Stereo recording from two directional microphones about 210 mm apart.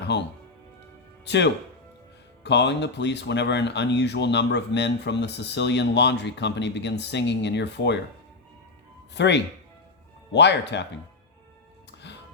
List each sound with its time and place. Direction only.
0.1 s speech: 55° left (ahead or behind)
9.1 s speech: 55° left (ahead or behind)
12.0 s music: 55° left (ahead or behind)